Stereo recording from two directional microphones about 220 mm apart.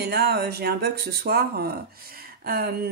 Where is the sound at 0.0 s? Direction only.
45° right (ahead or behind).